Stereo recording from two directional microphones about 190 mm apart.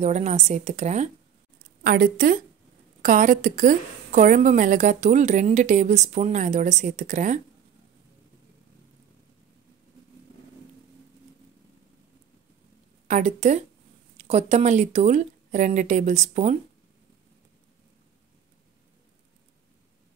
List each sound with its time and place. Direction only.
0.0 s a woman's voice: 35° right (ahead or behind)
1.8 s a woman's voice: 50° right (ahead or behind)
13.1 s a woman's voice: 40° right (ahead or behind)